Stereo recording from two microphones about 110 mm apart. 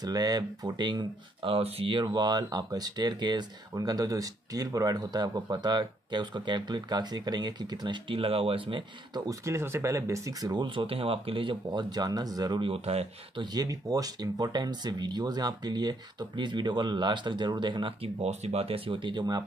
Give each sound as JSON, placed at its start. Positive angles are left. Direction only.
{"t": 0.0, "sound": "speech", "side_deg": -35}
{"t": 9.3, "sound": "speech", "side_deg": -25}
{"t": 12.6, "sound": "speech", "side_deg": -65}
{"t": 13.4, "sound": "speech", "side_deg": -35}
{"t": 18.2, "sound": "speech", "side_deg": -80}